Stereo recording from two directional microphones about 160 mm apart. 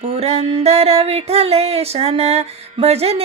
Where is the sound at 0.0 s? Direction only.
40° right (ahead or behind).